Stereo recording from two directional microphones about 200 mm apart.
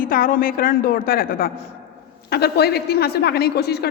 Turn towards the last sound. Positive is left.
turn(degrees=55)  # may be behind; listen again after turning